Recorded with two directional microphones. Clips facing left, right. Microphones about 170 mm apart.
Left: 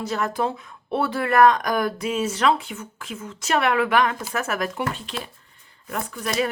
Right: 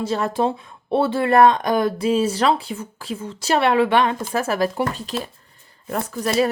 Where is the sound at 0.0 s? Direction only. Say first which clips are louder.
Right 4 dB; 30° right (ahead or behind).